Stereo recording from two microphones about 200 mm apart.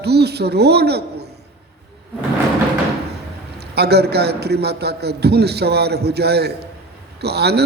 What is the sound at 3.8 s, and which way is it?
Speech, 55° right (ahead or behind).